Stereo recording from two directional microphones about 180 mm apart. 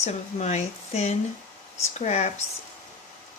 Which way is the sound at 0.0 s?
40° left (ahead or behind).